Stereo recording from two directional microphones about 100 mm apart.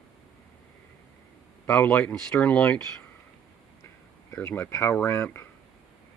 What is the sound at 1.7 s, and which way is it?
Speech, 15° left (ahead or behind).